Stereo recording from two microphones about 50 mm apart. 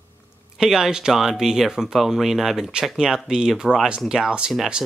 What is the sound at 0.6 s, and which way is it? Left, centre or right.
Speech, centre.